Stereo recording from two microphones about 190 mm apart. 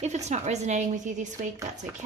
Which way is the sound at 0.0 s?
35° right (ahead or behind).